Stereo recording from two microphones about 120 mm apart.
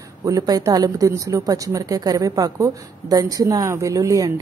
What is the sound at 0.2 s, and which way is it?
A woman's voice, 30° right (ahead or behind).